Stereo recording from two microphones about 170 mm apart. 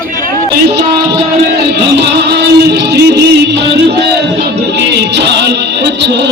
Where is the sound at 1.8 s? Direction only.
90° right.